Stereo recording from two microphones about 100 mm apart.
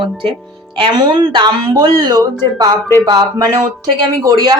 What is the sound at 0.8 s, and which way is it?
Speech, 50° right (ahead or behind).